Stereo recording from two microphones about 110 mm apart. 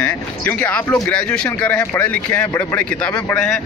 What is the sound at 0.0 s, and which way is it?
Speech, 15° left (ahead or behind).